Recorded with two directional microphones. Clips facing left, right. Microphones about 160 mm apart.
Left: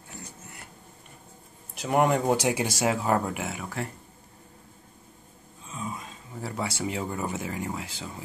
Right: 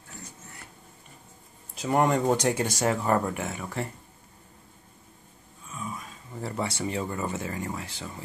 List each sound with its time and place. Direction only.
1.8 s speech: 5° left (ahead or behind)
5.7 s a sound: 25° left (ahead or behind)
6.4 s speech: 5° left (ahead or behind)